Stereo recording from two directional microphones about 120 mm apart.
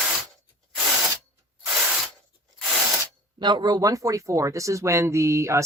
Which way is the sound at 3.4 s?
40° right (ahead or behind).